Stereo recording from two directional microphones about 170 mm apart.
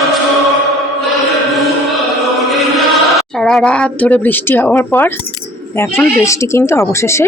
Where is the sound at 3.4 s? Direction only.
5° left (ahead or behind).